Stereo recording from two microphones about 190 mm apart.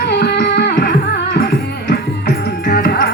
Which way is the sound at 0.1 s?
60° left (ahead or behind).